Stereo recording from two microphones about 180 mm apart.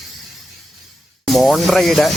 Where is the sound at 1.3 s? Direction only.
Centre (ahead or behind).